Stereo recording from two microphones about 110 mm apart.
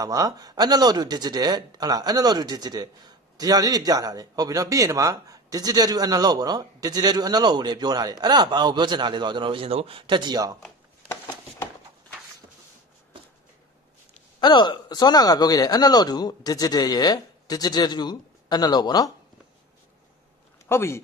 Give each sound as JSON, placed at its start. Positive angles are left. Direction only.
{"t": 0.0, "sound": "a man's voice", "side_deg": -35}
{"t": 14.4, "sound": "speech", "side_deg": 40}
{"t": 20.6, "sound": "speech", "side_deg": 20}